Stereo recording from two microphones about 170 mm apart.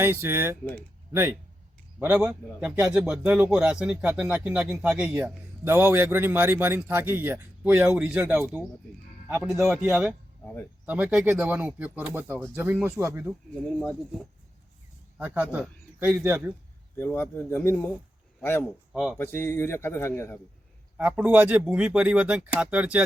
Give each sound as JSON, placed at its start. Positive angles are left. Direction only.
{"t": 0.0, "sound": "speech", "side_deg": -15}
{"t": 0.6, "sound": "a man's voice", "side_deg": 10}
{"t": 1.1, "sound": "speech", "side_deg": -15}
{"t": 10.4, "sound": "speech", "side_deg": 10}
{"t": 10.8, "sound": "speech", "side_deg": -10}
{"t": 15.2, "sound": "speech", "side_deg": -10}
{"t": 17.0, "sound": "a man's voice", "side_deg": 10}
{"t": 21.0, "sound": "speech", "side_deg": -10}